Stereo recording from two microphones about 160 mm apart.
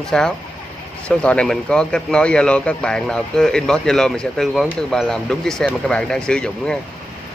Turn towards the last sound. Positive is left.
turn(degrees=5)  # may be behind; listen again after turning